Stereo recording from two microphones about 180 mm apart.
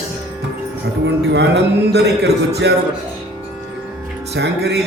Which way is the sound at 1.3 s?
70° right (ahead or behind).